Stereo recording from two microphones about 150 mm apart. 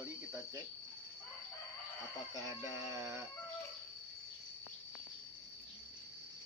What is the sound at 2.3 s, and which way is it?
Speech, 20° right (ahead or behind).